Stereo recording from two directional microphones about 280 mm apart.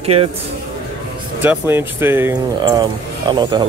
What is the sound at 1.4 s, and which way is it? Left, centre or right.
Speech, centre.